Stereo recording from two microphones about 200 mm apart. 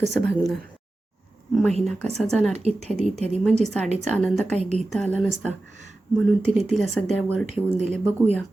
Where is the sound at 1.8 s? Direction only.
5° left (ahead or behind).